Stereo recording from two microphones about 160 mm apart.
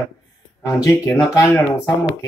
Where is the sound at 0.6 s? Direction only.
20° left (ahead or behind).